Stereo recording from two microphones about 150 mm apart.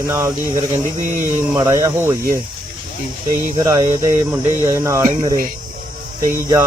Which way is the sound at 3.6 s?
20° right (ahead or behind).